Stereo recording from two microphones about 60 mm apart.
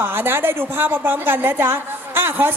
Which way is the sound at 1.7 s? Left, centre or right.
Right.